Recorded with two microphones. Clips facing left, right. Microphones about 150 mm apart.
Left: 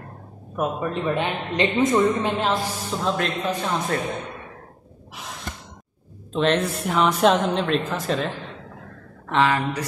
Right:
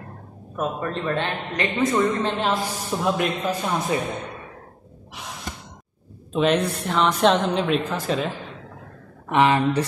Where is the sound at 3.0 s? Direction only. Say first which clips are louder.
Right 1 dB; 10° right (ahead or behind).